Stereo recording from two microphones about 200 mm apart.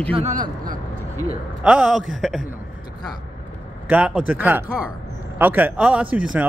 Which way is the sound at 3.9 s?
5° right (ahead or behind).